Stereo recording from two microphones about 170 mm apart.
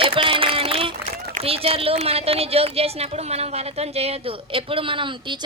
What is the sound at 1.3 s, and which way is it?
A woman's voice, 35° right (ahead or behind).